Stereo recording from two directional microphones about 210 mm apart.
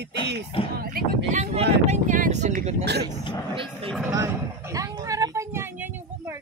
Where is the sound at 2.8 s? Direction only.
50° right (ahead or behind).